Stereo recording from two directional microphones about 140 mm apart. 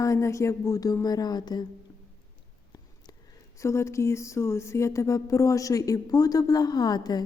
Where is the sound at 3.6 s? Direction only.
20° left (ahead or behind).